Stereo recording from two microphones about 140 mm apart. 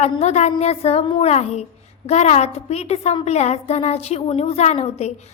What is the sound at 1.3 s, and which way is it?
A woman's voice, 50° left (ahead or behind).